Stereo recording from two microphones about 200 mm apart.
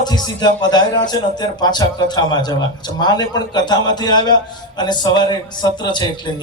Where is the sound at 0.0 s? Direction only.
20° left (ahead or behind).